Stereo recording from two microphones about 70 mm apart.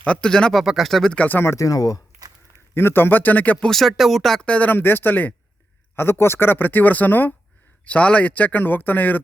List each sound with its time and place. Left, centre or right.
0.0 s speech: centre
0.6 s speech: centre
1.5 s speech: left
2.7 s speech: left
3.7 s speech: centre
4.4 s speech: left